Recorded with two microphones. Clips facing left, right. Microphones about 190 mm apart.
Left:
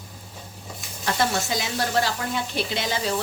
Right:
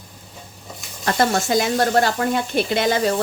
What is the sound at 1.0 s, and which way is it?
Speech, 55° right (ahead or behind).